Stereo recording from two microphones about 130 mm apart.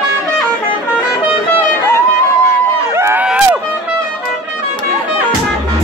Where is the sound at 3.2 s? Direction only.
10° right (ahead or behind).